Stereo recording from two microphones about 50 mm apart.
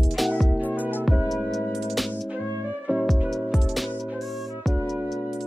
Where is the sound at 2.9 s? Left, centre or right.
Right.